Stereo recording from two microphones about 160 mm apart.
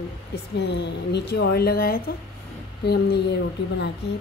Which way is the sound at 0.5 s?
90° left.